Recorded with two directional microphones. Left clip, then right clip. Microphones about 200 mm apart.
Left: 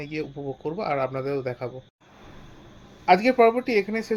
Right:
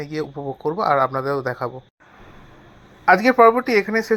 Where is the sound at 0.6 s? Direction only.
10° right (ahead or behind).